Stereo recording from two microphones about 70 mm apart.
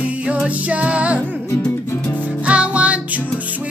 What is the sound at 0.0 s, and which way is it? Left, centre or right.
Music, centre.